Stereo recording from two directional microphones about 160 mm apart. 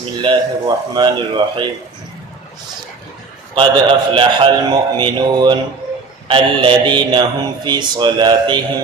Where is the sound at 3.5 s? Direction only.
30° right (ahead or behind).